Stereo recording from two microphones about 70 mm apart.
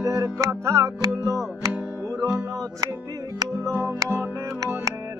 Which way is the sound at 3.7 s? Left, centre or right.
Right.